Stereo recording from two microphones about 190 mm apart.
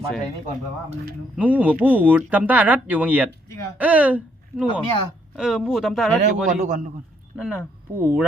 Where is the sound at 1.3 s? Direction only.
10° right (ahead or behind).